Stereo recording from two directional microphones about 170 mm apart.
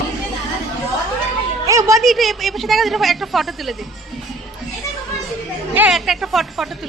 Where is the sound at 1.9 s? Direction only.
Centre (ahead or behind).